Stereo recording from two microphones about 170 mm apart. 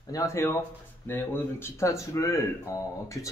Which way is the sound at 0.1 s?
20° left (ahead or behind).